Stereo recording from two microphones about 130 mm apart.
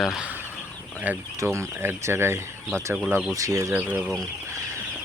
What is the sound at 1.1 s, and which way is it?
Speech, 20° right (ahead or behind).